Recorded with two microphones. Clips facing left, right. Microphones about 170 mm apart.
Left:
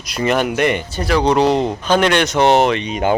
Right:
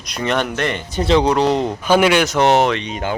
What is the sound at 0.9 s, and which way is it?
Speech, 20° right (ahead or behind).